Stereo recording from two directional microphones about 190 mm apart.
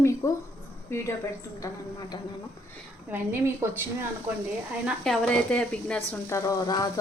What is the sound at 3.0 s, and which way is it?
A woman's voice, 10° right (ahead or behind).